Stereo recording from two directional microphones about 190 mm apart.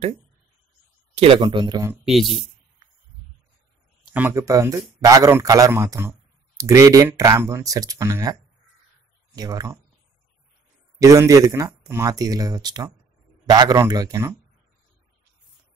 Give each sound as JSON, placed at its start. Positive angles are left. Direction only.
{"t": 1.1, "sound": "speech", "side_deg": -30}
{"t": 2.0, "sound": "speech", "side_deg": 0}
{"t": 4.1, "sound": "a man's voice", "side_deg": -10}
{"t": 11.0, "sound": "a man's voice", "side_deg": -15}